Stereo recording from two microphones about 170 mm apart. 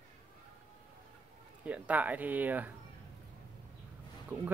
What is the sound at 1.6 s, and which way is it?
Speech, 10° right (ahead or behind).